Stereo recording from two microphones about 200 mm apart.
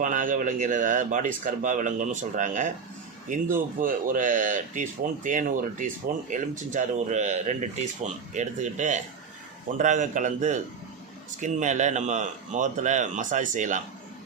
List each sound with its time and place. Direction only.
0.0 s speech: 40° right (ahead or behind)